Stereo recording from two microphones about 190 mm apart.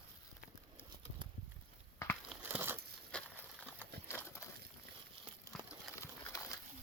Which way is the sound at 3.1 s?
5° left (ahead or behind).